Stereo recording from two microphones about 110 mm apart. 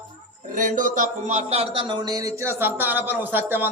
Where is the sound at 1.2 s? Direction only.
80° right.